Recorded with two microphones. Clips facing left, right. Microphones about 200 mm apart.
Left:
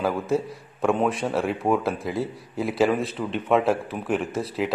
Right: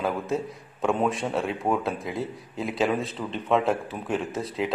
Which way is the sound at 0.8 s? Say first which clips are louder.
Left 2 dB; centre (ahead or behind).